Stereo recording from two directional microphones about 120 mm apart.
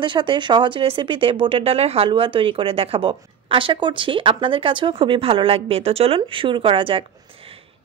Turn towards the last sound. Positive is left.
turn(degrees=-50)  # may be behind; listen again after turning